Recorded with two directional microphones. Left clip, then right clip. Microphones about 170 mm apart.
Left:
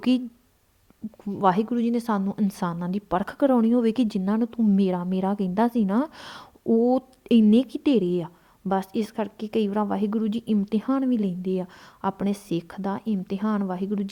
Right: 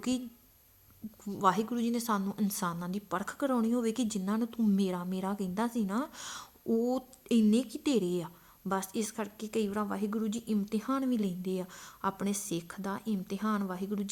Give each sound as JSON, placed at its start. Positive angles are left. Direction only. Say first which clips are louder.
{"t": 0.1, "sound": "a woman's voice", "louder": "left 10 dB", "side_deg": 45}